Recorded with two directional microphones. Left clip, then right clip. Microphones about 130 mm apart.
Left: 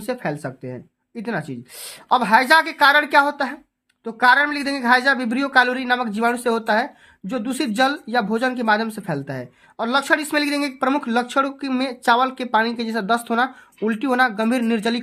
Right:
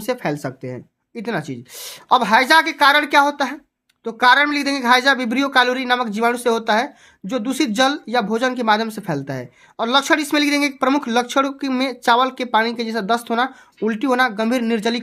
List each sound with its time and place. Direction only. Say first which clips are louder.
0.0 s speech: right 3 dB; 40° right (ahead or behind); by 15.0 s 20° right (ahead or behind)